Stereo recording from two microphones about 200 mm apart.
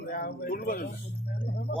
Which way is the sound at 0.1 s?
50° left (ahead or behind).